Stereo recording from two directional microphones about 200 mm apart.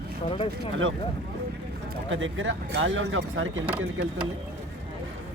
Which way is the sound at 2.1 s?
70° right (ahead or behind).